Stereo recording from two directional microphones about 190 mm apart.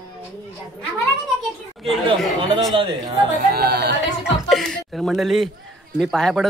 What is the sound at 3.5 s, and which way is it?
Speech, 55° right (ahead or behind).